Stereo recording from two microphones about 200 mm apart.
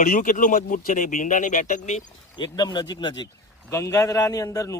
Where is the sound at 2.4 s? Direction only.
20° left (ahead or behind).